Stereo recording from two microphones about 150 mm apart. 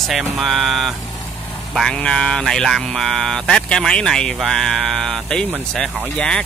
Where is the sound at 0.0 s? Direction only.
Centre (ahead or behind).